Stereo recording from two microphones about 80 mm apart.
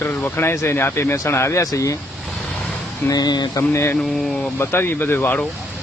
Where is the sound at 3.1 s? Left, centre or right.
Left.